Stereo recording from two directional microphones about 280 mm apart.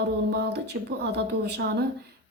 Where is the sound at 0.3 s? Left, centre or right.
Right.